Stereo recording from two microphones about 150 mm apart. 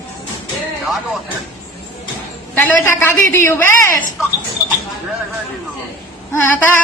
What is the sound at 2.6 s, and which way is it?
A woman's voice, 15° left (ahead or behind).